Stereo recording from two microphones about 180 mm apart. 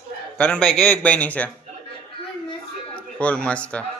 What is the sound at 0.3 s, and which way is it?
A man's voice, 5° left (ahead or behind).